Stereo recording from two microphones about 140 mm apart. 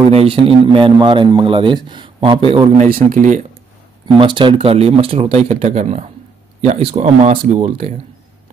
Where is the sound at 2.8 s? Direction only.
85° right.